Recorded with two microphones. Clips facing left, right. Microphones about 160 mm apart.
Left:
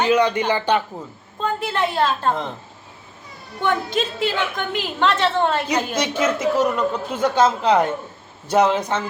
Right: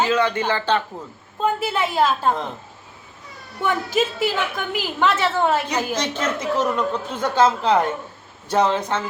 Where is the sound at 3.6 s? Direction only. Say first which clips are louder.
Even; 5° right (ahead or behind).